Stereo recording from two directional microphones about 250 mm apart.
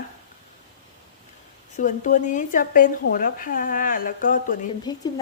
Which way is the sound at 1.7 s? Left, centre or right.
Left.